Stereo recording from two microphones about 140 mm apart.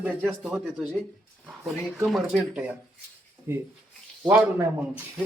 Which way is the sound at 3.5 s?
20° right (ahead or behind).